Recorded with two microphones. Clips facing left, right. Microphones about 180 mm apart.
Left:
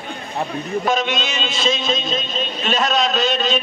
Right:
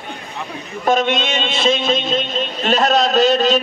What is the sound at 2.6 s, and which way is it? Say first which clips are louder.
A man's voice: right 4 dB; 30° right (ahead or behind).